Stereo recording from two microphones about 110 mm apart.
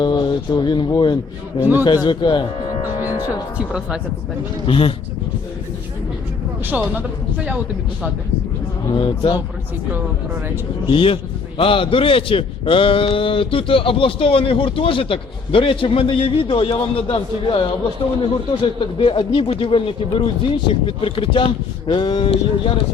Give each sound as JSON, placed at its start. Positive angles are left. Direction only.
{"t": 0.0, "sound": "speech", "side_deg": 45}
{"t": 3.0, "sound": "speech", "side_deg": -10}
{"t": 4.6, "sound": "speech", "side_deg": 55}
{"t": 6.7, "sound": "speech", "side_deg": -15}
{"t": 8.9, "sound": "speech", "side_deg": 50}
{"t": 10.8, "sound": "a man's voice", "side_deg": 55}